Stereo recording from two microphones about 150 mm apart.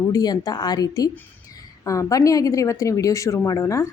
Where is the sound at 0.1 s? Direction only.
25° left (ahead or behind).